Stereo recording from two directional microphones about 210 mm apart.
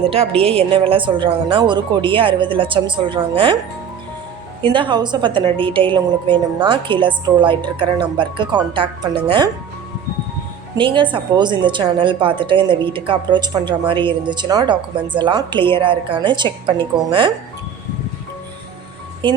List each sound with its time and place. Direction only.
0.1 s a woman's voice: 30° right (ahead or behind)
4.6 s a woman's voice: 25° right (ahead or behind)
10.8 s a woman's voice: 25° right (ahead or behind)
19.2 s a woman's voice: 25° right (ahead or behind)